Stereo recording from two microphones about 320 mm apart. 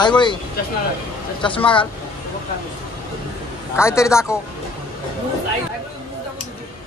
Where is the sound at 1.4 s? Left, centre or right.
Centre.